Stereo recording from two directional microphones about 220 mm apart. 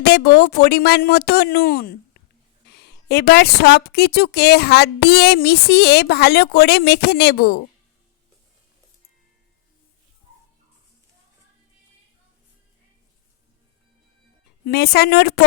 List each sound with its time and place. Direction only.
0.0 s a woman's voice: 45° left (ahead or behind)
14.6 s a woman's voice: 45° left (ahead or behind)